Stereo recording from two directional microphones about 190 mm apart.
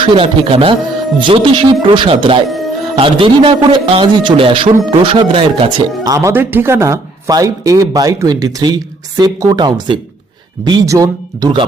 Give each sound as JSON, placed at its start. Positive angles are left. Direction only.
{"t": 0.0, "sound": "speech", "side_deg": -30}